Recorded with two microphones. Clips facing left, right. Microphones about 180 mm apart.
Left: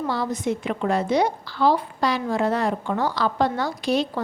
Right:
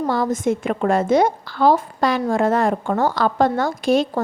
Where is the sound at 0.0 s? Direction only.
45° right (ahead or behind).